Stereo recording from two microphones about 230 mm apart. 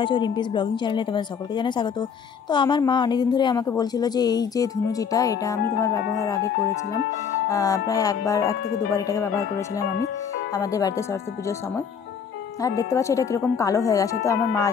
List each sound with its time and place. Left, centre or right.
0.0 s speech: centre
10.5 s speech: centre